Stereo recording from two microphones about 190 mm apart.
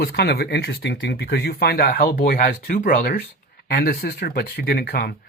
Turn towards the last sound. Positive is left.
turn(degrees=55)  # may be behind; listen again after turning